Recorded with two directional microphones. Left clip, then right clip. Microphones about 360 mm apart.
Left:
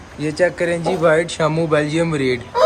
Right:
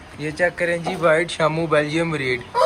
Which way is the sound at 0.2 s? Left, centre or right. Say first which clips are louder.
Left 3 dB; centre.